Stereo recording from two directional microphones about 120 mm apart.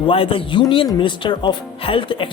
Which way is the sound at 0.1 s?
50° left (ahead or behind).